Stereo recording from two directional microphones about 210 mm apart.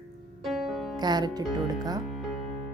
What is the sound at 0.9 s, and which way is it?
Speech, 20° right (ahead or behind).